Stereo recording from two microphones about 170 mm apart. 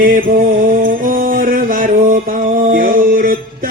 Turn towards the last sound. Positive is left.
turn(degrees=-55)  # may be behind; listen again after turning